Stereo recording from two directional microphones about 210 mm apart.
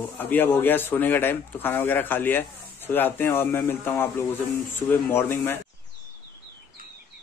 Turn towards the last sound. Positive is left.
turn(degrees=10)  # may be behind; listen again after turning